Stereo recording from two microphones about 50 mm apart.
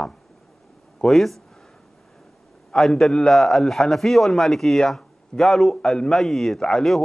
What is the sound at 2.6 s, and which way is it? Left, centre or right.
A man's voice, centre.